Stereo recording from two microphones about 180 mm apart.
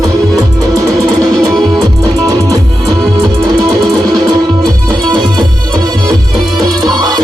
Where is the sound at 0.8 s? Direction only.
20° right (ahead or behind).